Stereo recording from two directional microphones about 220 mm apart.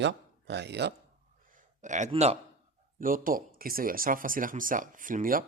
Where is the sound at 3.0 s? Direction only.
40° right (ahead or behind).